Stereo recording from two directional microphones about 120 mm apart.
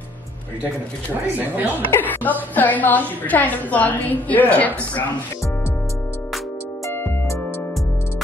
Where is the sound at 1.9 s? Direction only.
15° left (ahead or behind).